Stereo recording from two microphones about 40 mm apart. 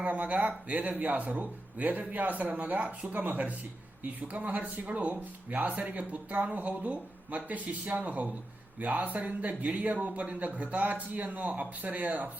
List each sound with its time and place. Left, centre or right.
0.0 s speech: right